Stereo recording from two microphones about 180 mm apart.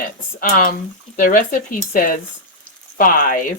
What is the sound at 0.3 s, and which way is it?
Speech, 50° left (ahead or behind).